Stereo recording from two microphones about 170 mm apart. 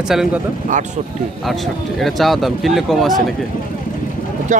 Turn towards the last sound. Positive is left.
turn(degrees=-45)  # may be behind; listen again after turning